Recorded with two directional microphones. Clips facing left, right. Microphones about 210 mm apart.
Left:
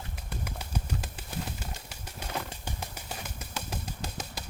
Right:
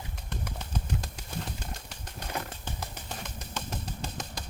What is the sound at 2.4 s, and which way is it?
Music, 10° left (ahead or behind).